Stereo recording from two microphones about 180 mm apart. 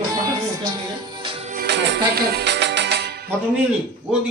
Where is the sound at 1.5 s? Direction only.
70° right (ahead or behind).